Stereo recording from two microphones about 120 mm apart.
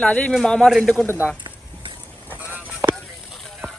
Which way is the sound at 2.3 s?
15° right (ahead or behind).